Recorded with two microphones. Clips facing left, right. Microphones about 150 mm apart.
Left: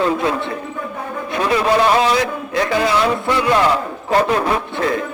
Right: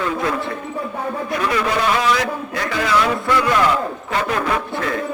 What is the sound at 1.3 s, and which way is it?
A man's voice, 25° left (ahead or behind).